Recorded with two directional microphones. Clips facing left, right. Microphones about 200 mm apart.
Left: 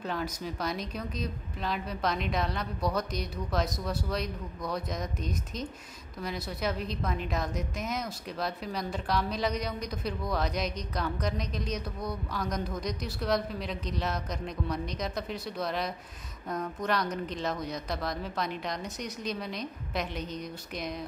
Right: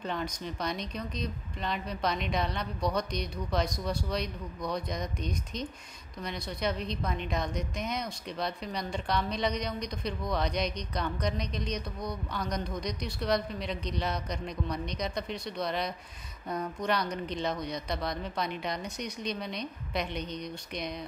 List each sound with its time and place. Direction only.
0.0 s a woman's voice: 5° left (ahead or behind)